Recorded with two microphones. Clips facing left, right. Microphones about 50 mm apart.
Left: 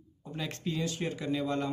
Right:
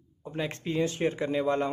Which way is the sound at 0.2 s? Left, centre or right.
Right.